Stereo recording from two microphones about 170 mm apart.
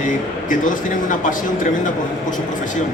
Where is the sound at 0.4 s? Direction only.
50° left (ahead or behind).